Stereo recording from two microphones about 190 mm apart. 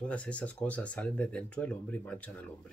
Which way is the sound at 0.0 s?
5° left (ahead or behind).